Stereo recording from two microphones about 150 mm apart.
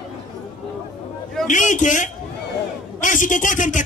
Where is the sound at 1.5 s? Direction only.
55° left (ahead or behind).